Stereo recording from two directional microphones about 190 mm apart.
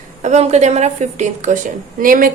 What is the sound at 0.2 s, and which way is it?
A woman's voice, 35° right (ahead or behind).